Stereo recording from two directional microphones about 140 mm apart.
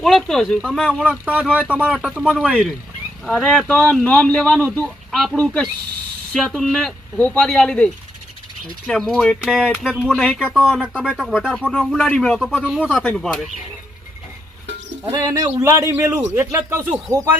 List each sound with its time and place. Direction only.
0.0 s speech: centre (ahead or behind)
1.2 s speech: 10° right (ahead or behind)
2.2 s speech: 5° left (ahead or behind)
15.1 s a man's voice: 25° right (ahead or behind)